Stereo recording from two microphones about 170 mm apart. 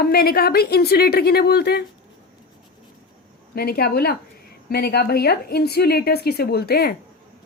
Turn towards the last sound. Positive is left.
turn(degrees=65)  # may be behind; listen again after turning